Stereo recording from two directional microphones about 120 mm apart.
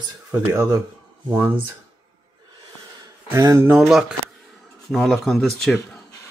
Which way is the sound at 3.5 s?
15° right (ahead or behind).